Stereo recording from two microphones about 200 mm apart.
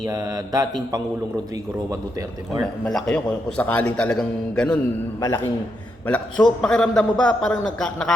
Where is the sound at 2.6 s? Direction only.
5° left (ahead or behind).